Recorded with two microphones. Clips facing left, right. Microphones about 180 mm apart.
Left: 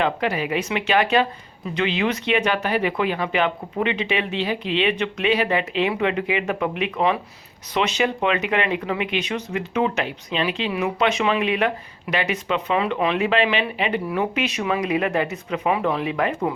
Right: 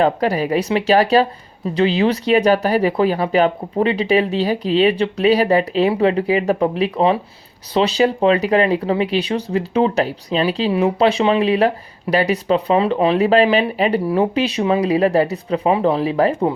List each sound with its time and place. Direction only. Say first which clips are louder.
0.0 s speech: right 6 dB; 35° right (ahead or behind)